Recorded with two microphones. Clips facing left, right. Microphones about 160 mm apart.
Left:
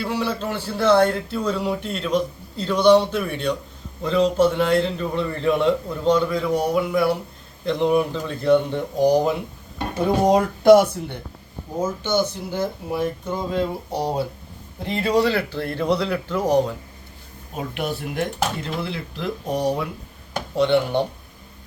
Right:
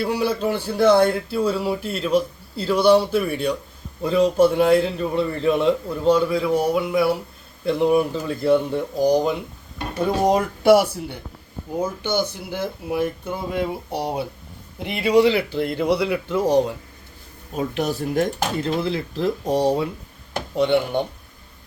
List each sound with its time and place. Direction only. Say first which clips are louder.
0.0 s a man's voice: right 3 dB; 10° right (ahead or behind)
17.7 s speech: right 4 dB; 40° right (ahead or behind)
20.3 s dishes: even; 5° right (ahead or behind)